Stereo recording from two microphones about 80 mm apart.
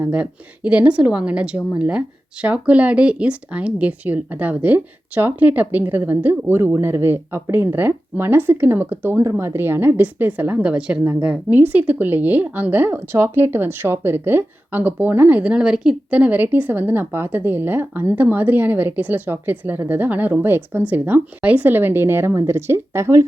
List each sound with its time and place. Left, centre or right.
0.0 s a woman's voice: centre; by 23.2 s right